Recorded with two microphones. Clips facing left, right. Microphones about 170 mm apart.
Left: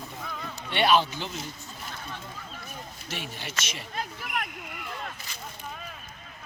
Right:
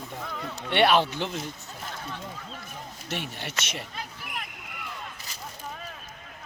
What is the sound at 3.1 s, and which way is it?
Speech, 60° right (ahead or behind).